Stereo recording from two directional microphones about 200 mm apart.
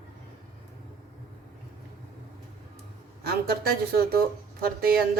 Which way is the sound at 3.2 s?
50° right (ahead or behind).